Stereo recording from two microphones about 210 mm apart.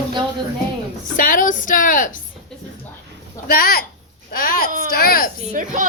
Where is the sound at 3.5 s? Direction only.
45° left (ahead or behind).